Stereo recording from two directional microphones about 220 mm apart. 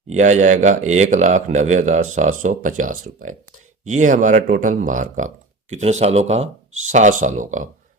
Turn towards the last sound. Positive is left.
turn(degrees=-35)  # may be behind; listen again after turning